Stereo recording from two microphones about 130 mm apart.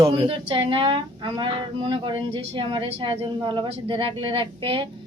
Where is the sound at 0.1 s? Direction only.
40° right (ahead or behind).